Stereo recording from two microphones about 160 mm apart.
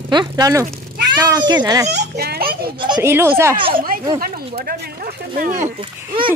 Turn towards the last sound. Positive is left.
turn(degrees=-35)  # may be behind; listen again after turning